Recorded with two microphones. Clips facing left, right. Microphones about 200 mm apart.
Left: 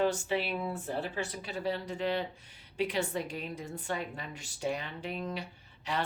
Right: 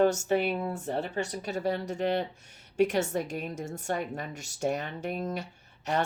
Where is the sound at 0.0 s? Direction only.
45° right (ahead or behind).